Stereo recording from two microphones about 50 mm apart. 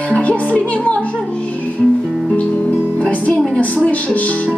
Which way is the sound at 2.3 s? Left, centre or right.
Left.